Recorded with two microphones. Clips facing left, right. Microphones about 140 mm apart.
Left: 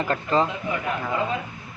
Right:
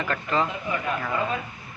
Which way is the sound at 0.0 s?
30° left (ahead or behind).